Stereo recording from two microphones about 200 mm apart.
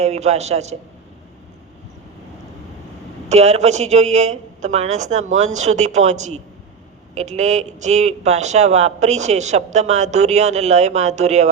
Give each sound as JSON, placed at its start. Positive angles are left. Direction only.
{"t": 0.0, "sound": "speech", "side_deg": -30}
{"t": 3.2, "sound": "speech", "side_deg": -35}